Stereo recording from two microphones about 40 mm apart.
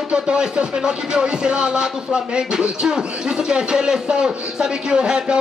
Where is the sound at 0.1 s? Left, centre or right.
Right.